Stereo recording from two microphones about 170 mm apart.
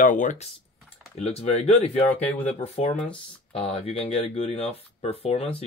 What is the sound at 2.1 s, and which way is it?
Speech, 10° left (ahead or behind).